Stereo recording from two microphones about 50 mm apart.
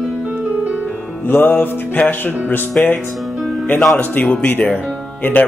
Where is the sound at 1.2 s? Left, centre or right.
Left.